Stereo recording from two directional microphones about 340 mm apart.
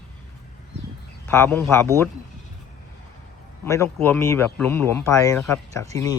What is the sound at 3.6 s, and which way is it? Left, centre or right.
A man's voice, centre.